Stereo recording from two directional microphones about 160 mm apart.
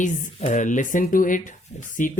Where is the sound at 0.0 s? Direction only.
45° left (ahead or behind).